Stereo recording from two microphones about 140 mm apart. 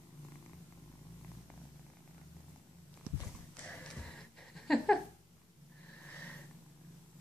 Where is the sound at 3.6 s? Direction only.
5° left (ahead or behind).